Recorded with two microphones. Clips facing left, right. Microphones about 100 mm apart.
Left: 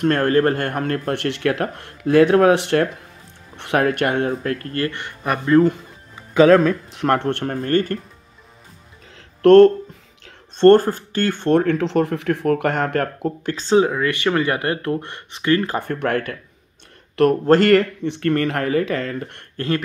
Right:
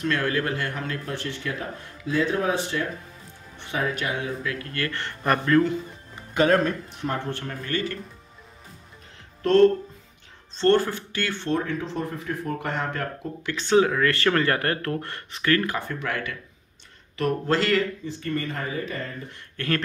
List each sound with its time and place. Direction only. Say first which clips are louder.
0.0 s speech: left 9 dB; 50° left (ahead or behind)
4.9 s speech: even; 10° left (ahead or behind)
6.9 s speech: left 10 dB; 85° left
7.4 s speech: left 9 dB; 50° left (ahead or behind)
9.4 s speech: left 8 dB; 55° left (ahead or behind)
10.6 s speech: left 9 dB; 45° left (ahead or behind)
13.5 s speech: left 4 dB; 35° left (ahead or behind)
13.7 s speech: left 2 dB; 20° left (ahead or behind)
15.8 s speech: left 8 dB; 55° left (ahead or behind); by 19.4 s 70° left (ahead or behind)